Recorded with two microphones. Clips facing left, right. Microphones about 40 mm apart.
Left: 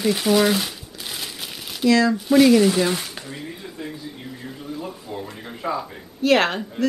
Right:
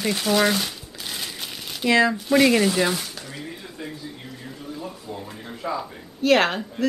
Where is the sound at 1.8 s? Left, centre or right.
Right.